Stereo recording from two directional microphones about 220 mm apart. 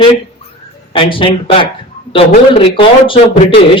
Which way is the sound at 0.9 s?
25° left (ahead or behind).